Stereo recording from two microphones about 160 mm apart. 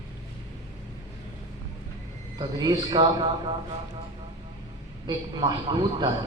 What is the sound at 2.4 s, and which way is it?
A man's voice, 25° right (ahead or behind).